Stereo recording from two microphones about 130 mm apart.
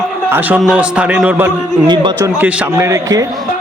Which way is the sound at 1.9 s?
35° right (ahead or behind).